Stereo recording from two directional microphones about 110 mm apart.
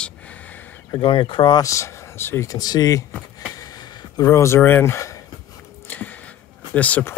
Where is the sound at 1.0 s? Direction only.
55° left (ahead or behind).